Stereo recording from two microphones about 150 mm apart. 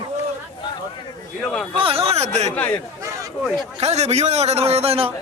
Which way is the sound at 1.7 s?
40° right (ahead or behind).